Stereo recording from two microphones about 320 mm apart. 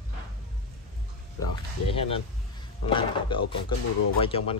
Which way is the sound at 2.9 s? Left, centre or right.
Centre.